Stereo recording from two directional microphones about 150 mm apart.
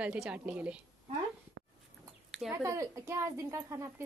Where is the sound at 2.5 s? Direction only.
20° right (ahead or behind).